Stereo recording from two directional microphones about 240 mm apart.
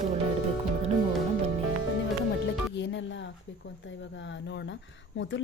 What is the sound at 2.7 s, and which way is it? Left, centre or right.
Music, left.